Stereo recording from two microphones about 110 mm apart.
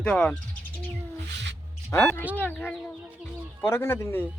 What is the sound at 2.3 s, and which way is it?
Speech, 15° left (ahead or behind).